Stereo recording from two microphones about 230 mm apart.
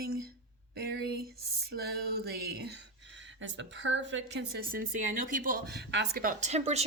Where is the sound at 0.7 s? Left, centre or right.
Right.